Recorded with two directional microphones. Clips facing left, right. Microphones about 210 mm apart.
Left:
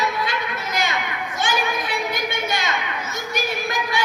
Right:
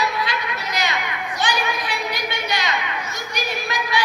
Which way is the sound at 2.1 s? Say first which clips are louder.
Left 1 dB; 50° left (ahead or behind).